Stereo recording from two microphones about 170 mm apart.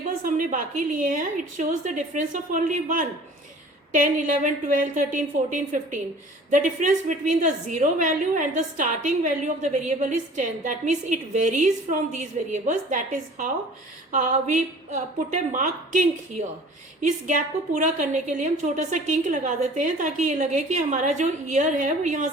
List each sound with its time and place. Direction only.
0.2 s a woman's voice: 50° right (ahead or behind)
17.2 s a woman's voice: 50° right (ahead or behind)